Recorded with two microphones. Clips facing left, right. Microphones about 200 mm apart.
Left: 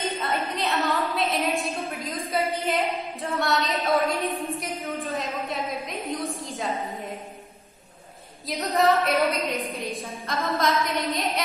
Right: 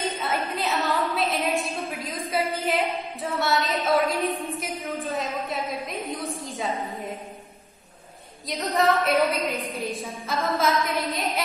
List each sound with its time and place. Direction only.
0.3 s a sound: centre (ahead or behind)
2.0 s a woman's voice: centre (ahead or behind)
8.5 s a woman's voice: centre (ahead or behind)